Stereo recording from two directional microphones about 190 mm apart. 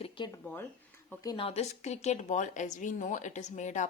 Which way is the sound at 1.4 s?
35° left (ahead or behind).